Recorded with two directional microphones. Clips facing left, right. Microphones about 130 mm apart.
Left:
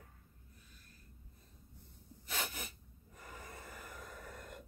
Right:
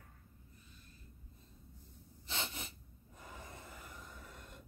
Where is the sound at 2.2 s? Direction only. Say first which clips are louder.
Left 1 dB; 25° right (ahead or behind).